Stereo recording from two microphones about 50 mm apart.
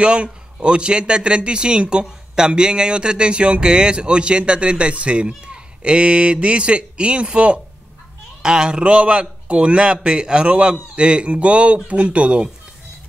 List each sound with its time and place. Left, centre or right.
0.0 s speech: right